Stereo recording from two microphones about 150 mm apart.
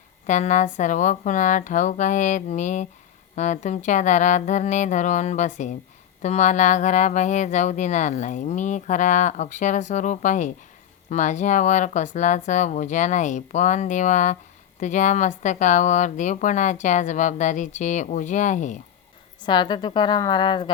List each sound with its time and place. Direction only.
0.3 s a woman's voice: 55° left (ahead or behind)
19.5 s a woman's voice: 30° left (ahead or behind)